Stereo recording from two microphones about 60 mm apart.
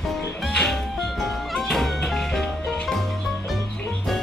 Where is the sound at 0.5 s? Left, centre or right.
Centre.